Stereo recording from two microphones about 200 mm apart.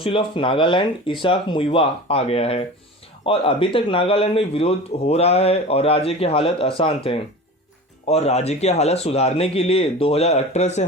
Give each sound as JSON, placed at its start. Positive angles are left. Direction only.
{"t": 0.0, "sound": "a man's voice", "side_deg": 25}